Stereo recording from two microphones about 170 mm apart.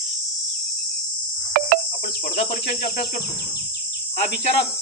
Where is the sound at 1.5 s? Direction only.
55° right (ahead or behind).